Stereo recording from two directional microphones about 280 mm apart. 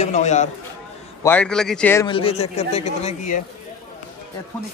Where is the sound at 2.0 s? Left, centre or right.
Centre.